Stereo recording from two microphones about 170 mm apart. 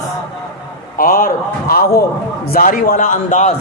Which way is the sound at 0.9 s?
55° left (ahead or behind).